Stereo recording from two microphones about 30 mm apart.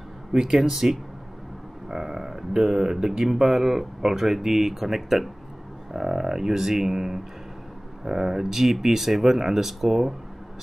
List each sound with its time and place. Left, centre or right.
0.3 s speech: centre
5.9 s speech: centre